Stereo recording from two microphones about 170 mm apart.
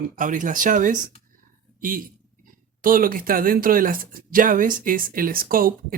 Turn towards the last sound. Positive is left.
turn(degrees=-55)  # may be behind; listen again after turning